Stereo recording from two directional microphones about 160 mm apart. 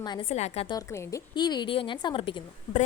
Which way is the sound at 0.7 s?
20° left (ahead or behind).